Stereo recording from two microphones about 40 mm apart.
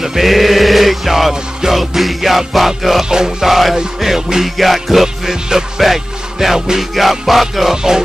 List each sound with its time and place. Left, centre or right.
0.0 s music: centre
3.1 s music: centre
3.4 s music: centre
7.7 s music: centre